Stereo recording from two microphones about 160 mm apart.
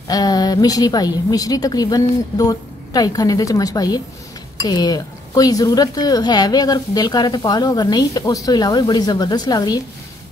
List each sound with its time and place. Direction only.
0.1 s speech: 25° left (ahead or behind)